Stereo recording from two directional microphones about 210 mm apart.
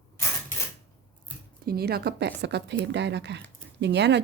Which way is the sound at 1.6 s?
50° right (ahead or behind).